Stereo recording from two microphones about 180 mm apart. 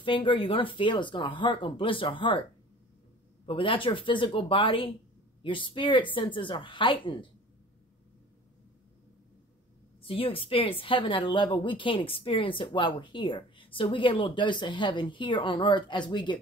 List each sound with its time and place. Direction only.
0.0 s a woman's voice: 30° left (ahead or behind)
3.4 s a woman's voice: 30° left (ahead or behind)
10.0 s a woman's voice: 30° left (ahead or behind)